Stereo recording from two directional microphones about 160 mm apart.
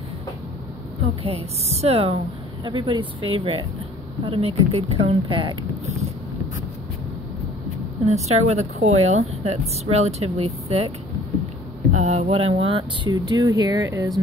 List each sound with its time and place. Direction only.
1.2 s speech: 40° right (ahead or behind)
2.6 s speech: 30° right (ahead or behind)
8.0 s speech: 45° right (ahead or behind)
11.9 s speech: 45° right (ahead or behind); by 14.1 s 20° right (ahead or behind)